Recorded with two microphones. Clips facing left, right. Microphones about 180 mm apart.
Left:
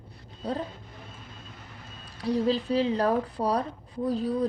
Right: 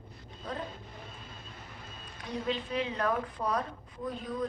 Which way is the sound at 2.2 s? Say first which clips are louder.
Left 9 dB; 35° left (ahead or behind).